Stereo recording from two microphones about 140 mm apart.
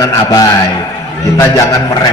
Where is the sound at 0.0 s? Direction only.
25° left (ahead or behind).